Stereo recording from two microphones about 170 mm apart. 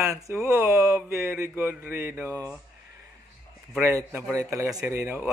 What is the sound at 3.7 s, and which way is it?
Speech, 10° right (ahead or behind).